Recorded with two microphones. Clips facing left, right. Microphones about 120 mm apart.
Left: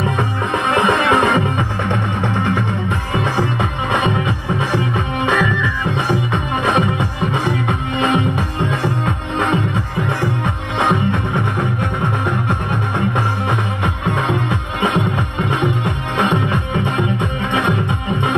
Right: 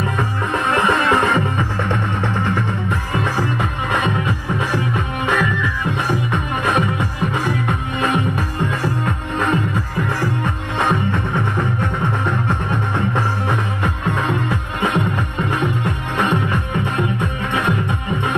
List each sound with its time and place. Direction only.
0.7 s music: 20° left (ahead or behind)
12.4 s music: 15° left (ahead or behind)